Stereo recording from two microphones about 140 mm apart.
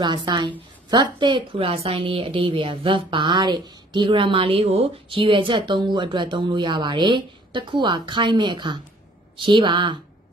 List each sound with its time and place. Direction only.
0.0 s a woman's voice: 35° right (ahead or behind)